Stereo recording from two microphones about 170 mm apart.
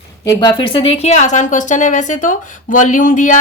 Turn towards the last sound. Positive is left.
turn(degrees=50)  # may be behind; listen again after turning